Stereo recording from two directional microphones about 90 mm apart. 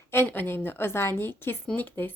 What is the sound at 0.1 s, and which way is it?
Speech, 25° left (ahead or behind).